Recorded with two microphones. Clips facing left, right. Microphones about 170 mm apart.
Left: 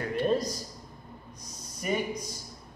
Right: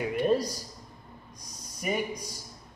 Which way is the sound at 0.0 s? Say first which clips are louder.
Right 1 dB; 10° right (ahead or behind).